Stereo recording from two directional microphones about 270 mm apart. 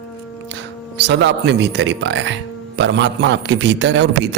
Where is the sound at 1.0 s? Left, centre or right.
Right.